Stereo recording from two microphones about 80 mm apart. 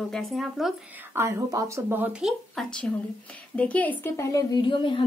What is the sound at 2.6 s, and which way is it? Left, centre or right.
A woman's voice, centre.